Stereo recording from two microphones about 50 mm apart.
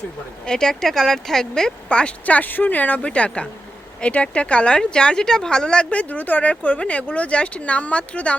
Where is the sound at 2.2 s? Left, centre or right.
Left.